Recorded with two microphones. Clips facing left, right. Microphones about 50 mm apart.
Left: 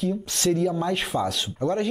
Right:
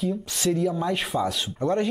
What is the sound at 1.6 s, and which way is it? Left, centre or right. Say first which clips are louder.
Speech: right 1 dB; right.